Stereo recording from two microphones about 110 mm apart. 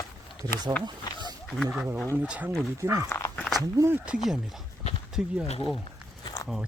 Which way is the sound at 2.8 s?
30° right (ahead or behind).